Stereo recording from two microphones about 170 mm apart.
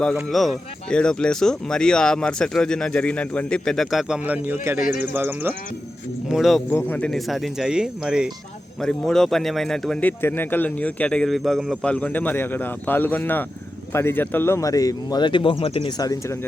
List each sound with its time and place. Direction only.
0.0 s speech: centre (ahead or behind)
6.2 s speech: centre (ahead or behind)
6.7 s a man's voice: 10° left (ahead or behind); by 15.9 s 30° left (ahead or behind)